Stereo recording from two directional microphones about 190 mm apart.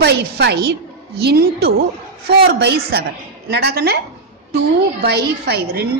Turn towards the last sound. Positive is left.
turn(degrees=-55)  # may be behind; listen again after turning